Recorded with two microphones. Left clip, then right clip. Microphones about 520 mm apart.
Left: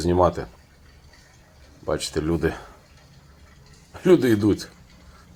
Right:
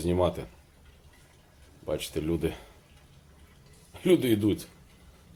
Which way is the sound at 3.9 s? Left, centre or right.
Right.